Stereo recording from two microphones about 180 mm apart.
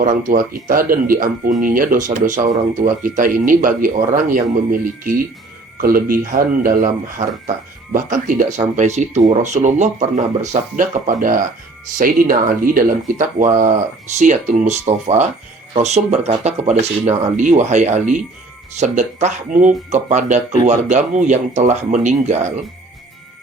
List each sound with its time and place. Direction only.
0.0 s speech: 50° right (ahead or behind)
7.9 s speech: 45° right (ahead or behind)